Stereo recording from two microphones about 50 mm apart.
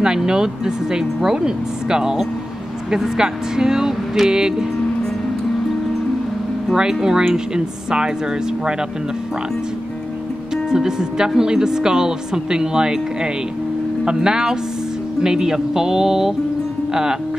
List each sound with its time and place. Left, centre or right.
0.0 s speech: centre
6.7 s speech: centre
10.7 s speech: centre